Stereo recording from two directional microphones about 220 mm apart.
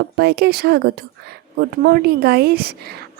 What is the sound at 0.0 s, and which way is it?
Speech, 45° right (ahead or behind).